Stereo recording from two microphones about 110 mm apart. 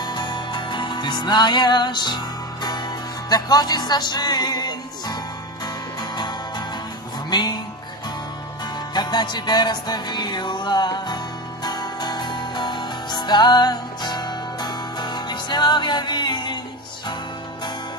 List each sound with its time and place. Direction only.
0.0 s music: 40° left (ahead or behind)
7.2 s music: 40° left (ahead or behind)
8.9 s music: 40° left (ahead or behind)